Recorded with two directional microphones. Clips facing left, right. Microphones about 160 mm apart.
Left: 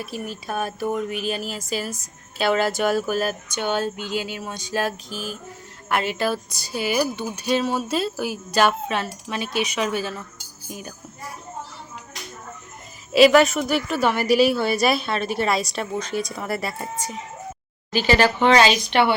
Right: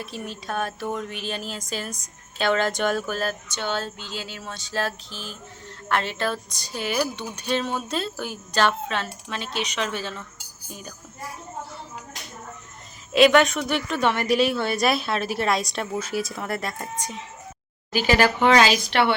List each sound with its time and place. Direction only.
0.0 s speech: 10° left (ahead or behind)
13.1 s a woman's voice: centre (ahead or behind)
17.9 s a woman's voice: 10° right (ahead or behind)